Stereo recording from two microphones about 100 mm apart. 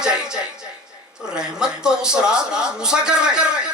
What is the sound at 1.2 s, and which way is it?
Speech, 10° right (ahead or behind).